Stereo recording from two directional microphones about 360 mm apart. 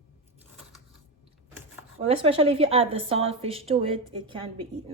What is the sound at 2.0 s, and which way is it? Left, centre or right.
A woman's voice, centre.